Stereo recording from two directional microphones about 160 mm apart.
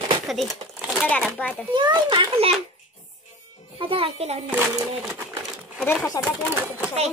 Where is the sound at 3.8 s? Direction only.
35° right (ahead or behind).